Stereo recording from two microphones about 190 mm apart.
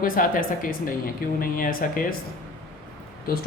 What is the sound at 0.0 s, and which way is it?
Speech, 45° left (ahead or behind).